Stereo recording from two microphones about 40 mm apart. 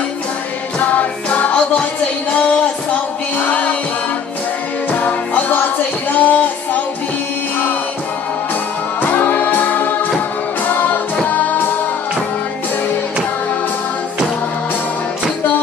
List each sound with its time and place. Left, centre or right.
0.7 s music: left
5.0 s music: left
9.0 s music: left